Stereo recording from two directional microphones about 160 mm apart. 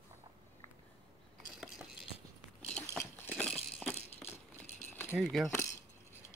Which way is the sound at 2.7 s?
10° left (ahead or behind).